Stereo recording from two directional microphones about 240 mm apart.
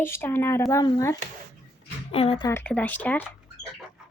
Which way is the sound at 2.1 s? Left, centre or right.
Left.